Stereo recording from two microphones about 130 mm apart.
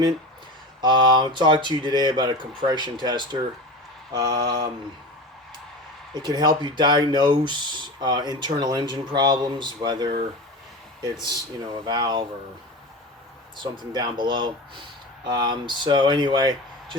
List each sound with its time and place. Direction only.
0.8 s speech: 35° right (ahead or behind)
6.2 s speech: 35° right (ahead or behind)
13.6 s speech: 35° right (ahead or behind)